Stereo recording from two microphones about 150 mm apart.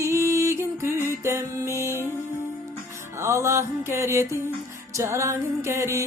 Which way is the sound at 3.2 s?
20° right (ahead or behind).